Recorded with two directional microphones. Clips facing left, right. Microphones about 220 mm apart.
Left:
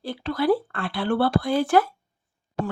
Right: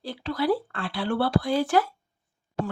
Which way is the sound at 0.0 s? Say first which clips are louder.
Left 3 dB; 55° left (ahead or behind).